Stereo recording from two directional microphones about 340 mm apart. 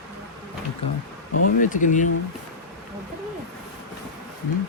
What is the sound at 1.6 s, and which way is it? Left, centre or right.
Speech, left.